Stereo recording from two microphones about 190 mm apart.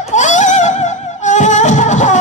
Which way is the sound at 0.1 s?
40° left (ahead or behind).